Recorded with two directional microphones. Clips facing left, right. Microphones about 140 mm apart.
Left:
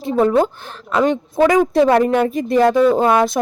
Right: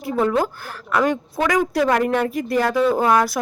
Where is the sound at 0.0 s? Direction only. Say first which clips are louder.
Left 5 dB; 25° left (ahead or behind).